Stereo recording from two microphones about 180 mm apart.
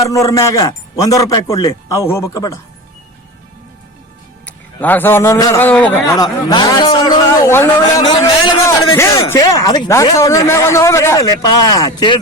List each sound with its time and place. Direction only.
0.0 s a man's voice: 15° left (ahead or behind)
4.8 s a man's voice: 10° left (ahead or behind)
6.1 s a man's voice: 20° left (ahead or behind)
8.0 s a man's voice: 25° left (ahead or behind)